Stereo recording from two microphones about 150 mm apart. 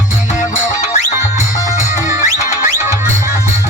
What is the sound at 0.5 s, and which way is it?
Music, 50° left (ahead or behind).